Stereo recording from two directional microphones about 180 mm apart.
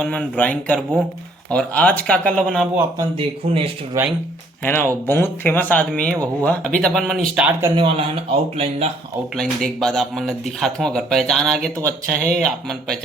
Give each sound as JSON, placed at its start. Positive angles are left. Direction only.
{"t": 0.0, "sound": "speech", "side_deg": 5}
{"t": 3.2, "sound": "speech", "side_deg": -30}
{"t": 4.0, "sound": "speech", "side_deg": -15}
{"t": 4.6, "sound": "speech", "side_deg": 10}
{"t": 7.6, "sound": "speech", "side_deg": -30}
{"t": 9.3, "sound": "speech", "side_deg": 0}